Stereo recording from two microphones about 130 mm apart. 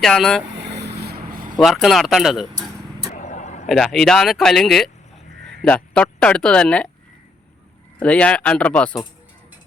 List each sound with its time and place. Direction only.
0.0 s speech: centre (ahead or behind)
1.3 s vehicle: 90° right
1.5 s speech: centre (ahead or behind)
3.2 s vehicle: 65° left (ahead or behind)
3.7 s speech: 5° left (ahead or behind)
7.9 s speech: 10° left (ahead or behind)